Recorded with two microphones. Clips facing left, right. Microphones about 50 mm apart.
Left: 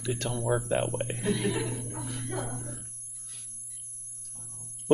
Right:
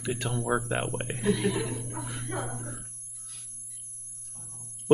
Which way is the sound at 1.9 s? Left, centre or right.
Centre.